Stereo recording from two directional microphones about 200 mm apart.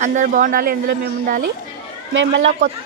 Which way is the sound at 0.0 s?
40° right (ahead or behind).